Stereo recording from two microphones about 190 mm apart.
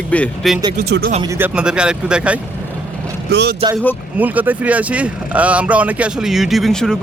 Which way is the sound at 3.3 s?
65° right (ahead or behind).